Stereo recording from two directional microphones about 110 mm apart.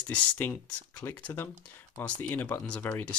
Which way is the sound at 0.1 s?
15° left (ahead or behind).